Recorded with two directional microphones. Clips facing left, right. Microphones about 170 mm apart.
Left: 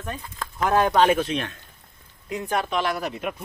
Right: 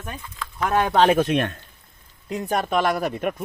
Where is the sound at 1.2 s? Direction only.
55° right (ahead or behind).